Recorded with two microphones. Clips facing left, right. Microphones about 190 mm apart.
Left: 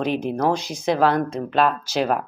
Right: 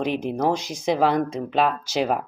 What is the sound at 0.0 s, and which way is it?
Speech, 15° right (ahead or behind).